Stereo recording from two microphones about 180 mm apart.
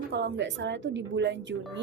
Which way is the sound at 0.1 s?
70° right (ahead or behind).